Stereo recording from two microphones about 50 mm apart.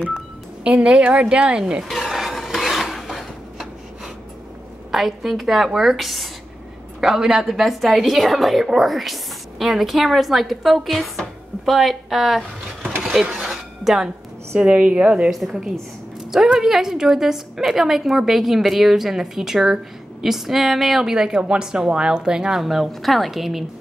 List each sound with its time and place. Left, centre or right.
0.7 s a woman's voice: right
1.9 s filing: centre
4.9 s a woman's voice: centre
7.0 s a woman's voice: centre
13.0 s mechanisms: centre
13.3 s a sound: centre
14.6 s a woman's voice: right
15.3 s a woman's voice: centre